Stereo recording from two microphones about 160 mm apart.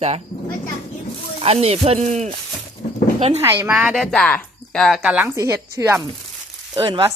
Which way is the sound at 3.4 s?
15° right (ahead or behind).